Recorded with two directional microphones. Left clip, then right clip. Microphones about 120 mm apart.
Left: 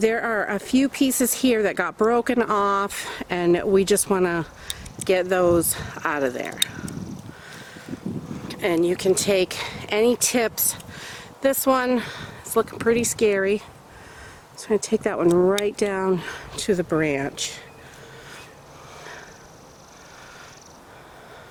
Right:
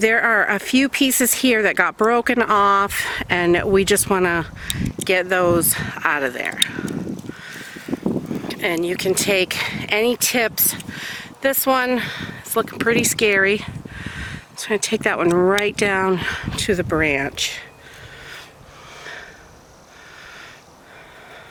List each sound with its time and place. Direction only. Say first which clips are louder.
0.0 s speech: right 6 dB; 30° right (ahead or behind)
7.4 s crow: right 6 dB; 25° right (ahead or behind)
8.4 s speech: left 1 dB; 20° right (ahead or behind)